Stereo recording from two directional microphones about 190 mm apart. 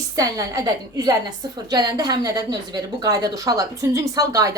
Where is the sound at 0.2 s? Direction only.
20° right (ahead or behind).